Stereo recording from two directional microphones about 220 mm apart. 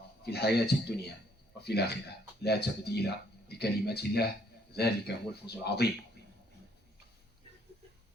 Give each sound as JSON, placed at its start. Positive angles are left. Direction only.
{"t": 0.2, "sound": "speech", "side_deg": 45}